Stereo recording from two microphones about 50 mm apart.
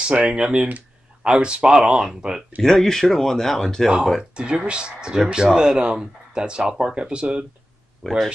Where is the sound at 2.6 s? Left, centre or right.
Centre.